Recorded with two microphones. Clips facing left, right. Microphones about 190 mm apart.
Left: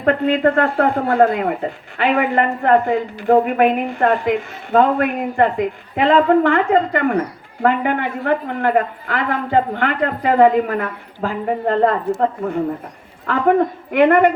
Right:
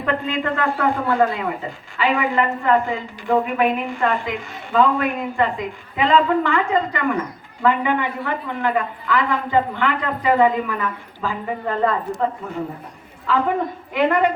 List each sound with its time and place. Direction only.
0.0 s a woman's voice: 60° left (ahead or behind)
13.3 s a woman's voice: 60° left (ahead or behind)